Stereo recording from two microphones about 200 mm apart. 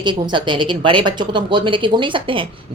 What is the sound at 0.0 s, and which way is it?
Speech, 25° right (ahead or behind).